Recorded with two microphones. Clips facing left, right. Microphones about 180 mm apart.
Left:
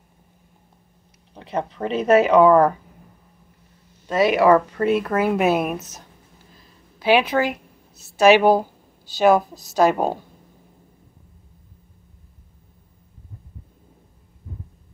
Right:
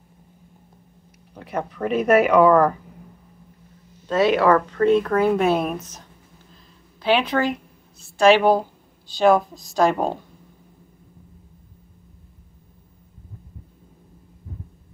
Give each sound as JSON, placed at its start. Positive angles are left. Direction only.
{"t": 1.4, "sound": "speech", "side_deg": 25}
{"t": 4.1, "sound": "a woman's voice", "side_deg": 10}